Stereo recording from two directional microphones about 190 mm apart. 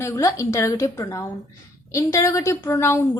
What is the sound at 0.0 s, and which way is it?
A woman's voice, 15° left (ahead or behind).